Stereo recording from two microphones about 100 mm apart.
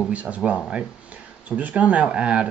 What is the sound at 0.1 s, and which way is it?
Speech, 15° right (ahead or behind).